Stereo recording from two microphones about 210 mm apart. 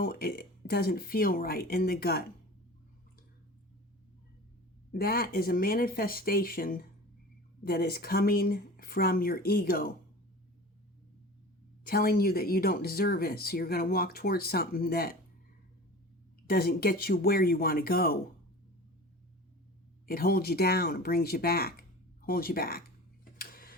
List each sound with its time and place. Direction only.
0.0 s speech: 45° left (ahead or behind)
4.9 s speech: 45° left (ahead or behind)
11.8 s speech: 45° left (ahead or behind)
16.5 s speech: 45° left (ahead or behind)
20.1 s speech: 45° left (ahead or behind)
23.4 s tick-tock: 45° left (ahead or behind)